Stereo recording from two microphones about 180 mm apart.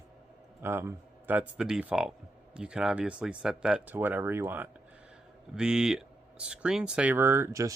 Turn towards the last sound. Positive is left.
turn(degrees=-15)  # may be behind; listen again after turning